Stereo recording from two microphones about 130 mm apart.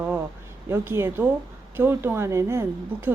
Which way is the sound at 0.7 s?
20° right (ahead or behind).